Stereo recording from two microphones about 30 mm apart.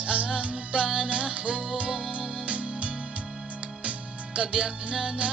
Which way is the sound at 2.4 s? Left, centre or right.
Right.